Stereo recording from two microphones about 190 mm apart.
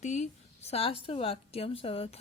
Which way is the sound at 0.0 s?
35° left (ahead or behind).